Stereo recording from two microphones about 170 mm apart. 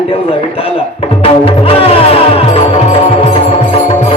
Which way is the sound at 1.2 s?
35° left (ahead or behind).